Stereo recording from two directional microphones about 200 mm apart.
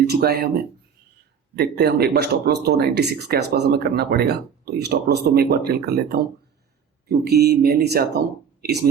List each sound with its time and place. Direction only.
0.1 s speech: 50° right (ahead or behind)